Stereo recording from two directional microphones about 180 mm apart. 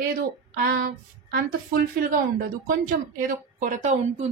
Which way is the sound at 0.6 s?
55° right (ahead or behind).